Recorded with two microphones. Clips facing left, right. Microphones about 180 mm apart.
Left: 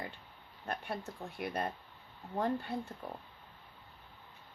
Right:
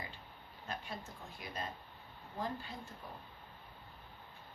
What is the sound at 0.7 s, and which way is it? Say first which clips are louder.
Speech: left 6 dB; 60° left (ahead or behind).